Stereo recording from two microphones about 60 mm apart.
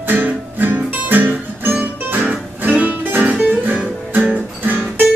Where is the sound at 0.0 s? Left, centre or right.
Right.